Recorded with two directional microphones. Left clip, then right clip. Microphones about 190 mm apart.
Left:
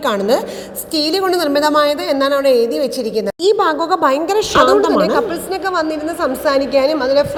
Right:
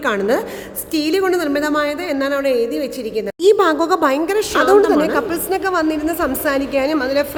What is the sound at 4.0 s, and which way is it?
Speech, 30° right (ahead or behind).